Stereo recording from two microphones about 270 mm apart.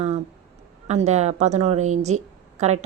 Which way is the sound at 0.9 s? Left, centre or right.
Right.